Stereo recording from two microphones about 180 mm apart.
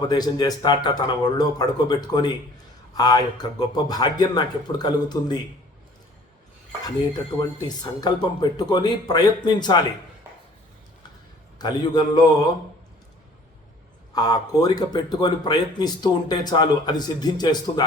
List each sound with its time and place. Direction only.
0.1 s a man's voice: 20° left (ahead or behind)
7.3 s a man's voice: 25° left (ahead or behind)
11.6 s a man's voice: 20° left (ahead or behind)
14.1 s a man's voice: 20° left (ahead or behind)